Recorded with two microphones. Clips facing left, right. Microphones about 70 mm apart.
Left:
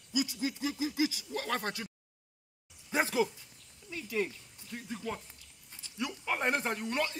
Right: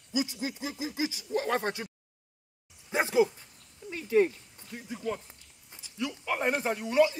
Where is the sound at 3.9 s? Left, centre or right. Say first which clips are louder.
Right 9 dB; right.